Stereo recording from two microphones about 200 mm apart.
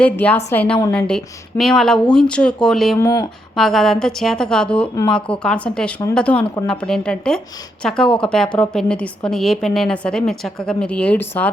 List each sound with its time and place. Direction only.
0.0 s a woman's voice: 10° left (ahead or behind)
3.0 s a woman's voice: 15° left (ahead or behind)
3.5 s a woman's voice: centre (ahead or behind)